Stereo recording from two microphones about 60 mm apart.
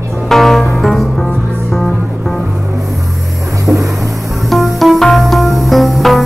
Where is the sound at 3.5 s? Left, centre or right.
Right.